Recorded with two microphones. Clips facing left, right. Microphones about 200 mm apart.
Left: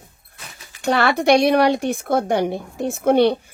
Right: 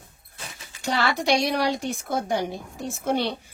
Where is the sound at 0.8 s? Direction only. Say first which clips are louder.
Left 7 dB; 55° left (ahead or behind).